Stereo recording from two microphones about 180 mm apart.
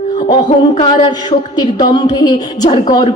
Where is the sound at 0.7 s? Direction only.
25° left (ahead or behind).